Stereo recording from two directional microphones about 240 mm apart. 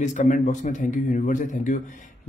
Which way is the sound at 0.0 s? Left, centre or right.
Left.